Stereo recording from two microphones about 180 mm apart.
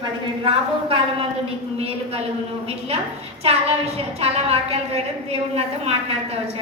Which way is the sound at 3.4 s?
35° right (ahead or behind).